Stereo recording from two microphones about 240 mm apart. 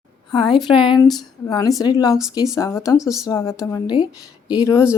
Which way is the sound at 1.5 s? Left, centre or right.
Centre.